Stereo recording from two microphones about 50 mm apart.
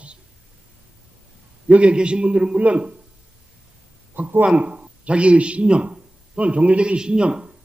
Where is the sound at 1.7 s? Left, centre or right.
Right.